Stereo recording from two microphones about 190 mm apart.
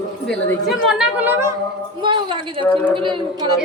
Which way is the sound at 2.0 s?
25° right (ahead or behind).